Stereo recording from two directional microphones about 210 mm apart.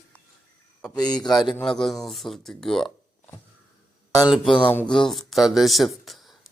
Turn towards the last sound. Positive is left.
turn(degrees=0)  # may be behind; listen again after turning